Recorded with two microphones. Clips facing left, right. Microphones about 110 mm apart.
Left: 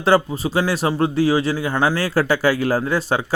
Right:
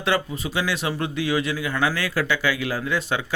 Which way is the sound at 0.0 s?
35° left (ahead or behind).